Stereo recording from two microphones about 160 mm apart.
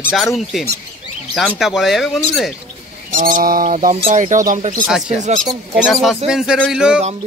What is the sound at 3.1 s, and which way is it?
Speech, 55° right (ahead or behind).